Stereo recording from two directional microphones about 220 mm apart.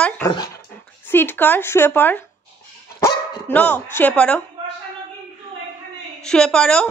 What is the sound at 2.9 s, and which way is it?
Dog, 15° left (ahead or behind).